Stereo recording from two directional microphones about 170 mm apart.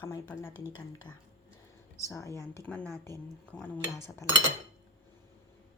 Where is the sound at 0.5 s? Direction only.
15° right (ahead or behind).